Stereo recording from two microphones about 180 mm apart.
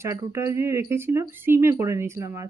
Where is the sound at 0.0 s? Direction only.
15° right (ahead or behind).